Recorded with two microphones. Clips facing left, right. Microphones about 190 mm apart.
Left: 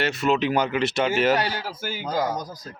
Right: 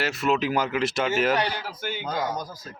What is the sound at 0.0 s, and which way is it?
Speech, centre (ahead or behind).